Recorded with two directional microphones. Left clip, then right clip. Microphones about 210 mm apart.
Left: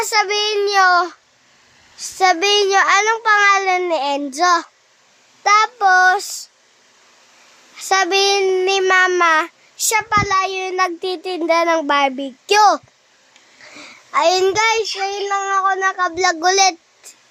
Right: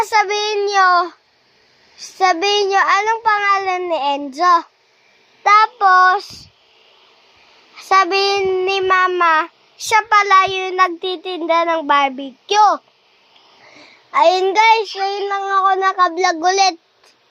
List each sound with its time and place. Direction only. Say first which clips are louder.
0.0 s a child's voice: right 1 dB; centre (ahead or behind)
5.4 s a child's voice: right 2 dB; 5° left (ahead or behind)
7.8 s a child's voice: right 2 dB; 5° left (ahead or behind)
9.9 s a child's voice: right 5 dB; 20° right (ahead or behind)
10.5 s a child's voice: right 3 dB; centre (ahead or behind); by 12.8 s 25° left (ahead or behind)
14.1 s a child's voice: right 2 dB; 5° left (ahead or behind)
15.6 s meow: right 3 dB; 5° right (ahead or behind)
16.1 s a child's voice: even; 5° left (ahead or behind)